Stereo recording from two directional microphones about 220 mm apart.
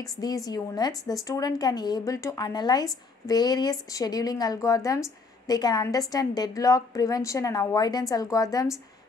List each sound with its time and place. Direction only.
0.0 s speech: 15° left (ahead or behind)